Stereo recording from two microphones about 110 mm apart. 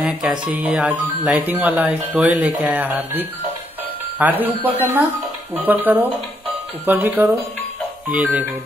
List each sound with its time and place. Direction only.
0.0 s speech: 5° right (ahead or behind)